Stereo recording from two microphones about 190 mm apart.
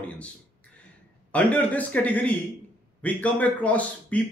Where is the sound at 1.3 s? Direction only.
10° left (ahead or behind).